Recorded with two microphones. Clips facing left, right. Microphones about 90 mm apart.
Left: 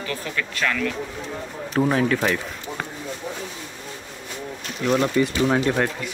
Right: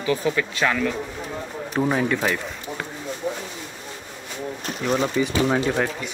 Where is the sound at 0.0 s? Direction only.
15° right (ahead or behind).